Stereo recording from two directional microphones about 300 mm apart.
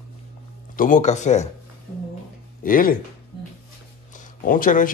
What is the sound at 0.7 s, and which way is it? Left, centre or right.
Speech, left.